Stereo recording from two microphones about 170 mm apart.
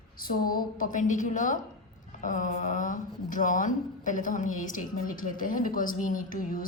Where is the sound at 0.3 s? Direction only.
55° left (ahead or behind).